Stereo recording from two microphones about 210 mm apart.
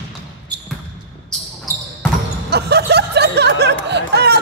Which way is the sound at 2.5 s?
50° right (ahead or behind).